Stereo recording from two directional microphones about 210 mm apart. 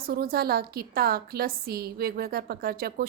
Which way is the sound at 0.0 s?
45° right (ahead or behind).